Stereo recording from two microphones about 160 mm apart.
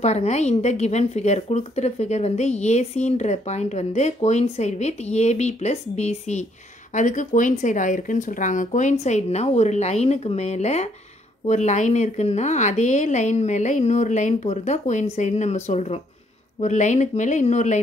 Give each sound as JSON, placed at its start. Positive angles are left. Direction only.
{"t": 0.0, "sound": "a woman's voice", "side_deg": 45}